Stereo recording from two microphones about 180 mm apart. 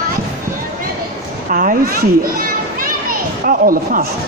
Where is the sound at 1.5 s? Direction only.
50° right (ahead or behind).